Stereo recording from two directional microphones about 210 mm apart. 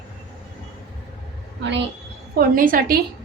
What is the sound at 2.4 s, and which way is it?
Speech, 40° right (ahead or behind).